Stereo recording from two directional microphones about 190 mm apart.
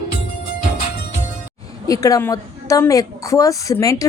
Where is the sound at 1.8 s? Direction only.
20° left (ahead or behind).